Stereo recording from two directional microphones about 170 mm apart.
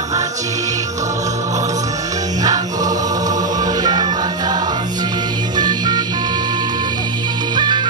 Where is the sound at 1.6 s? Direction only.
20° right (ahead or behind).